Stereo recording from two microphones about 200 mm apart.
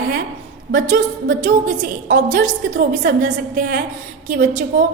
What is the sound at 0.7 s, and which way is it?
A woman's voice, 40° right (ahead or behind).